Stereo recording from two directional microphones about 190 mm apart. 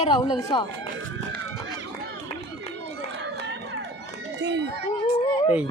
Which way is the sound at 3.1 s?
65° right (ahead or behind).